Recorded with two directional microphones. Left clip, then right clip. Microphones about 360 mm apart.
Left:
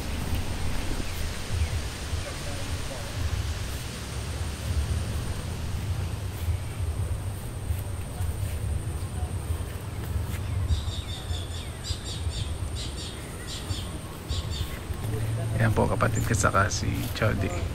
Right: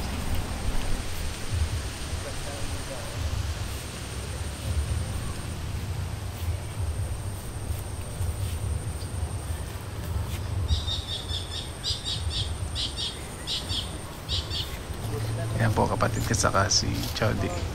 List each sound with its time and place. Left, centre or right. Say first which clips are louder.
15.5 s speech: even; centre